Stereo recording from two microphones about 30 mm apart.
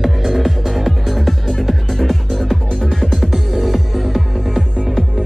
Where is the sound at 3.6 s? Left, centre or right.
Centre.